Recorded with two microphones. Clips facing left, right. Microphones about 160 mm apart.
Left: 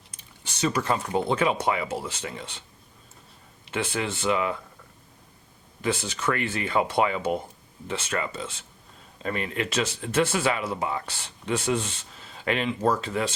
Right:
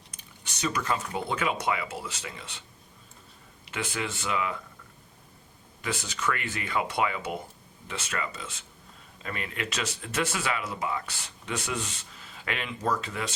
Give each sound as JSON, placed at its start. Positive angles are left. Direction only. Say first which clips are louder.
{"t": 0.4, "sound": "speech", "louder": "left 4 dB", "side_deg": 30}
{"t": 3.7, "sound": "speech", "louder": "left 5 dB", "side_deg": 30}
{"t": 5.8, "sound": "speech", "louder": "left 5 dB", "side_deg": 30}